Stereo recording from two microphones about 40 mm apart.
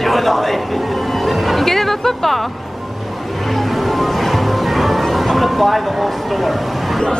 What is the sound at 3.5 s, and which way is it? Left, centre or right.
Music, centre.